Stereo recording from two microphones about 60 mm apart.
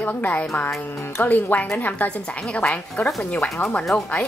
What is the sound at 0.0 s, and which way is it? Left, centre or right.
A woman's voice, left.